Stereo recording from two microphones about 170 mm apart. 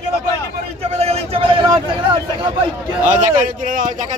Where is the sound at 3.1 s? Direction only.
50° right (ahead or behind).